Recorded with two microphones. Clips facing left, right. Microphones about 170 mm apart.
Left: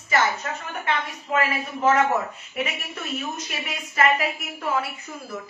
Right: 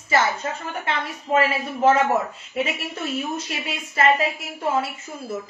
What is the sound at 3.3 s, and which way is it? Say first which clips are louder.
A woman's voice: right 3 dB; 30° right (ahead or behind).